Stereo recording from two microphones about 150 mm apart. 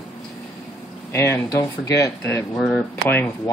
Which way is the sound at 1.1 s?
20° left (ahead or behind).